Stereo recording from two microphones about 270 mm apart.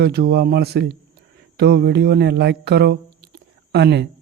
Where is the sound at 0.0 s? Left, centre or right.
Right.